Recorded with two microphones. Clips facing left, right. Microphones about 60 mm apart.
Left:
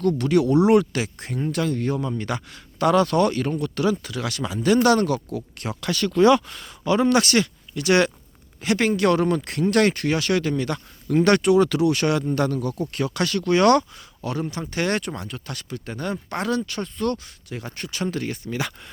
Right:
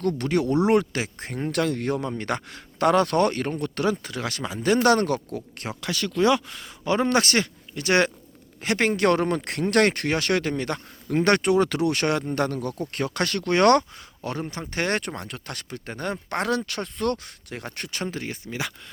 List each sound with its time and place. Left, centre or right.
0.2 s speech: right
1.4 s a man's voice: right
5.8 s speech: centre
6.8 s a man's voice: right
18.1 s speech: centre